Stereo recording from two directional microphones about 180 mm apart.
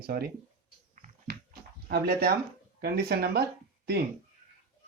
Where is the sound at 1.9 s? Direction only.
60° right (ahead or behind).